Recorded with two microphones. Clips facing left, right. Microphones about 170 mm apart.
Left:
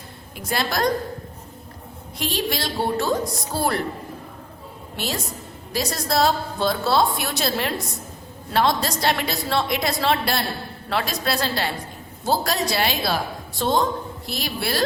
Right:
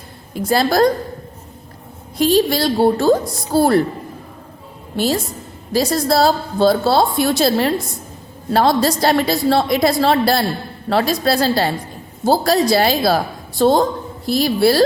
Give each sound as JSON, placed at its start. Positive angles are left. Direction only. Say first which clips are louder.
{"t": 0.3, "sound": "a woman's voice", "louder": "right 10 dB", "side_deg": -35}
{"t": 2.1, "sound": "a woman's voice", "louder": "right 11 dB", "side_deg": -35}
{"t": 4.9, "sound": "a woman's voice", "louder": "right 10 dB", "side_deg": -35}